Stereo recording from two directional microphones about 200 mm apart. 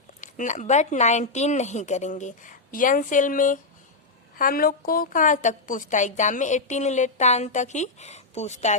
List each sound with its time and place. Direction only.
0.2 s a woman's voice: 40° left (ahead or behind)